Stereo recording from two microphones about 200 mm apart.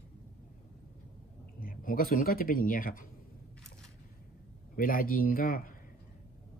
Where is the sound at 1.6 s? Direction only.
45° left (ahead or behind).